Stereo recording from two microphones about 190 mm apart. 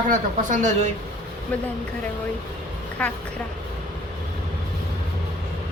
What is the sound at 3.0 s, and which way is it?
Speech, 5° left (ahead or behind).